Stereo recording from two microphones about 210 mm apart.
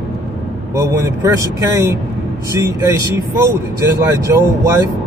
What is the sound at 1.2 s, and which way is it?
Speech, 15° right (ahead or behind).